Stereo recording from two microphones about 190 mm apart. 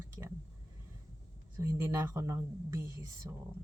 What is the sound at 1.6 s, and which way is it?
Speech, 15° right (ahead or behind).